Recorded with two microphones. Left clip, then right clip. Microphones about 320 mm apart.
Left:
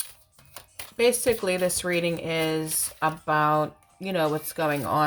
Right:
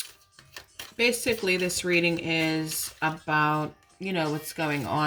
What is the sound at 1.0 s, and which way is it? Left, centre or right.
Speech, left.